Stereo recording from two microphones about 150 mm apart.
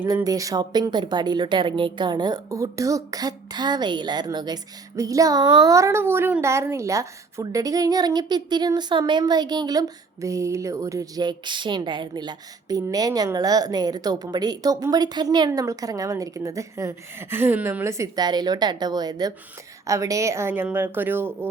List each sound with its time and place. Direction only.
0.3 s a woman's voice: 25° right (ahead or behind)